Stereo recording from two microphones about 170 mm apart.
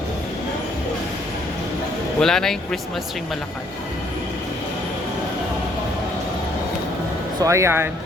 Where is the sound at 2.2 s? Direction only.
5° left (ahead or behind).